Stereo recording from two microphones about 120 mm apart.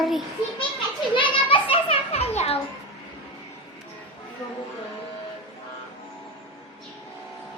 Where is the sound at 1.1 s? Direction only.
45° left (ahead or behind).